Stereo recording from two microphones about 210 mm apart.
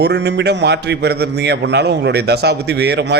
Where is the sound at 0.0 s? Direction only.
55° right (ahead or behind).